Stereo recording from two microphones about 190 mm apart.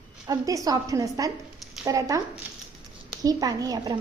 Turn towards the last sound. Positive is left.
turn(degrees=-20)  # may be behind; listen again after turning